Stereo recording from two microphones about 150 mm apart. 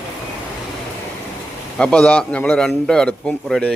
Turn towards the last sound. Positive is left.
turn(degrees=5)  # may be behind; listen again after turning